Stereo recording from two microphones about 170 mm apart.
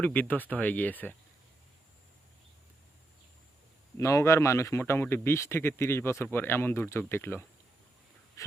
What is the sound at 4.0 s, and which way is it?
Speech, 15° left (ahead or behind).